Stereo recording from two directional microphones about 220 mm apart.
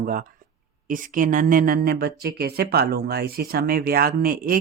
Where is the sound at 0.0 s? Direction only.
40° right (ahead or behind).